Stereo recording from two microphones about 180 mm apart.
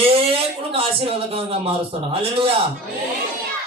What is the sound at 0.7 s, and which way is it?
A man's voice, 30° right (ahead or behind).